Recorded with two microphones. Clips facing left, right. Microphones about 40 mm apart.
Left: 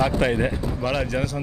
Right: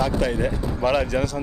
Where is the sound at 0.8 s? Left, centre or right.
Centre.